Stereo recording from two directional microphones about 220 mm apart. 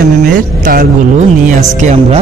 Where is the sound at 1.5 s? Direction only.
35° right (ahead or behind).